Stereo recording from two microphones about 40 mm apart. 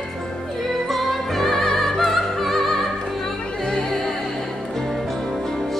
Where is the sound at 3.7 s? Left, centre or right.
Centre.